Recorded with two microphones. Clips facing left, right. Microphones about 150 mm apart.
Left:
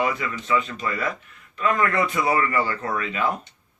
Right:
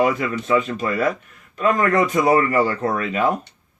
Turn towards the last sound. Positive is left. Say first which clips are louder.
# right 5 dB
turn(degrees=-40)  # may be behind; listen again after turning